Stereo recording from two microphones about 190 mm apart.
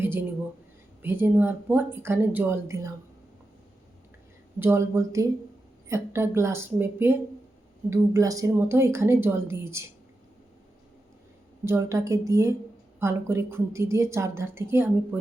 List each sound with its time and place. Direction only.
0.0 s a woman's voice: 10° right (ahead or behind)
4.6 s a woman's voice: 15° right (ahead or behind)
11.6 s a woman's voice: 15° right (ahead or behind)